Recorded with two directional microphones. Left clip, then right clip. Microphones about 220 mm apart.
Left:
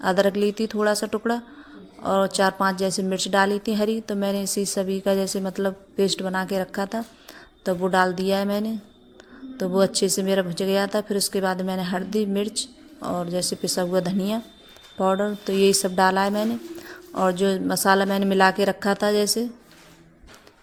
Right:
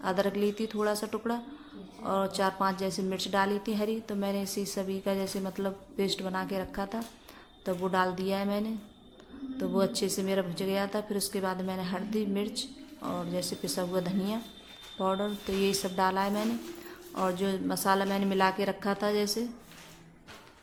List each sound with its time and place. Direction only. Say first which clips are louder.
0.0 s a woman's voice: left 9 dB; 30° left (ahead or behind)